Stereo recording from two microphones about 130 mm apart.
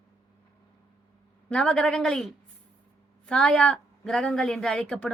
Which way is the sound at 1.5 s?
5° left (ahead or behind).